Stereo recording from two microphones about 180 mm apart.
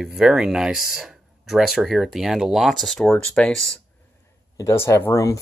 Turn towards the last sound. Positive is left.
turn(degrees=15)  # may be behind; listen again after turning